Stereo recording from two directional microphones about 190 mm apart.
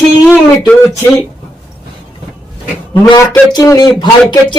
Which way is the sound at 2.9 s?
15° left (ahead or behind).